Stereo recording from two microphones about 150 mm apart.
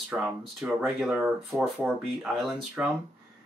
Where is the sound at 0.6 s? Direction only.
15° right (ahead or behind).